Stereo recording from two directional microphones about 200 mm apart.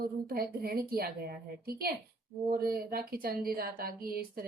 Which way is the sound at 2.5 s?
45° right (ahead or behind).